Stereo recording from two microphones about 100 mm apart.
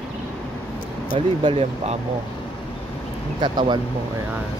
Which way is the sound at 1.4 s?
80° right.